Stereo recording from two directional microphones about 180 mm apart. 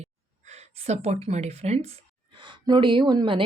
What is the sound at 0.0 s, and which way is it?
Speech, 40° right (ahead or behind).